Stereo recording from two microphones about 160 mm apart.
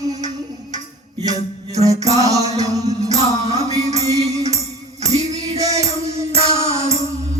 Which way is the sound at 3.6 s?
45° right (ahead or behind).